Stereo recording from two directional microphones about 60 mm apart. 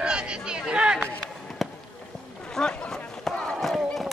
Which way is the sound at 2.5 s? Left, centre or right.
Centre.